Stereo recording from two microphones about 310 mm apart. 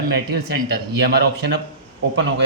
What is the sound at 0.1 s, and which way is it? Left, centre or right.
Speech, right.